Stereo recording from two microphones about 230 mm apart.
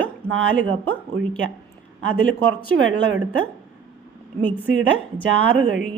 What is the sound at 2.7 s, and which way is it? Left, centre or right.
Speech, right.